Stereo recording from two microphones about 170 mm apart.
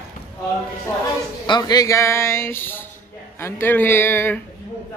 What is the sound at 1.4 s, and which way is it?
Speech, 25° left (ahead or behind).